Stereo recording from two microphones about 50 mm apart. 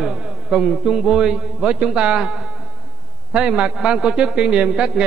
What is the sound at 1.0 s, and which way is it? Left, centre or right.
A man's voice, centre.